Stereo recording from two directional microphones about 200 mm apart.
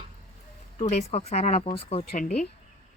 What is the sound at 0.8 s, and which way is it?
Speech, 30° left (ahead or behind).